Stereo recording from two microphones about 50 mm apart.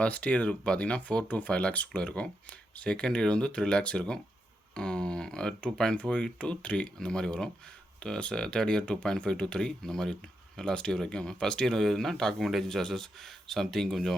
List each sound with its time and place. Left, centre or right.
0.0 s speech: left; by 14.2 s centre